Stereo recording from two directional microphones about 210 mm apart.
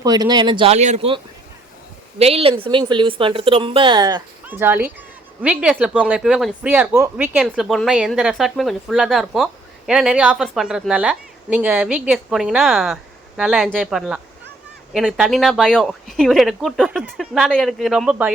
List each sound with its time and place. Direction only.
0.0 s speech: 20° right (ahead or behind)
4.4 s speech: 10° right (ahead or behind)